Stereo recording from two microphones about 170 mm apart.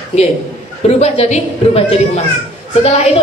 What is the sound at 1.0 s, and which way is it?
A woman's voice, 35° left (ahead or behind).